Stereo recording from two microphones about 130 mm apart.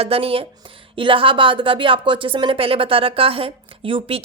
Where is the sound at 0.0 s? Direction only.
50° right (ahead or behind).